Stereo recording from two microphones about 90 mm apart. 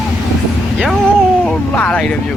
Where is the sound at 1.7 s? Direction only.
15° left (ahead or behind).